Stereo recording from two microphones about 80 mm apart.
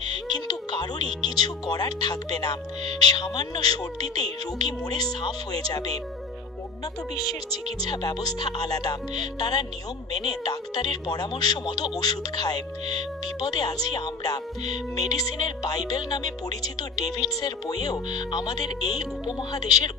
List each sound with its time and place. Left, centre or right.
0.1 s music: left
3.0 s speech: left
7.3 s speech: left
18.1 s speech: left